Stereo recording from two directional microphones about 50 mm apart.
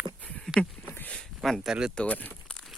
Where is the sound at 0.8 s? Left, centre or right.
Left.